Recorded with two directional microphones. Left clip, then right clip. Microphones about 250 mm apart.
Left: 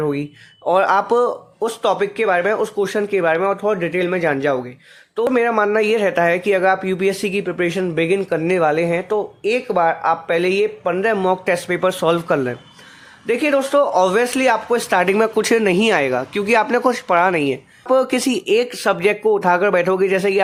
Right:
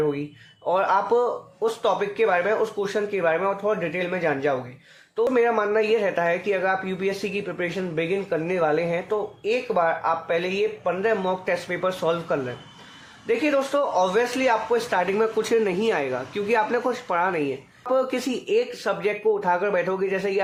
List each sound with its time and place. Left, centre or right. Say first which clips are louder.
0.1 s speech: left 5 dB; left